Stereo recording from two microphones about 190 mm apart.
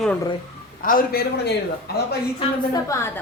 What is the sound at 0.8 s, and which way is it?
Speech, 45° left (ahead or behind).